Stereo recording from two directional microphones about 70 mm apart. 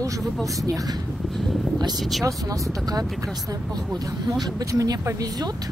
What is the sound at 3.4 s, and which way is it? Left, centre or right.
Speech, right.